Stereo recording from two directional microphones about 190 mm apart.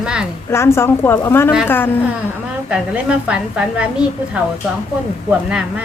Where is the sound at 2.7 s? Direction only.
5° right (ahead or behind).